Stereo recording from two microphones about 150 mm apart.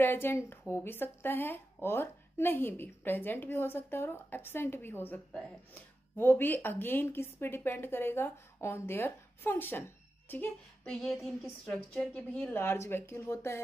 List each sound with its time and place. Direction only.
0.0 s a woman's voice: 15° left (ahead or behind)
11.0 s a woman's voice: centre (ahead or behind); by 13.6 s 15° left (ahead or behind)